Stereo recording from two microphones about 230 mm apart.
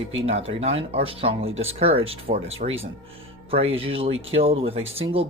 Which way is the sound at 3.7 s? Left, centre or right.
Right.